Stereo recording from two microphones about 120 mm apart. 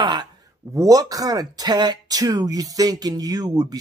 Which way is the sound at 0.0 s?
35° right (ahead or behind).